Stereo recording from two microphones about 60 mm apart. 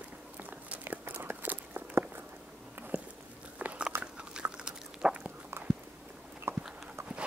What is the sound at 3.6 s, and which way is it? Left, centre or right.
Biting, right.